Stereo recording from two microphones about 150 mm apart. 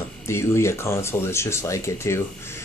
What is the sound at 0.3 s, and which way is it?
Speech, 20° left (ahead or behind).